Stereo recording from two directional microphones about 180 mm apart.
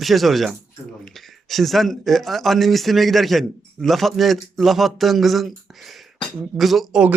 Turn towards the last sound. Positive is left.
turn(degrees=-5)  # may be behind; listen again after turning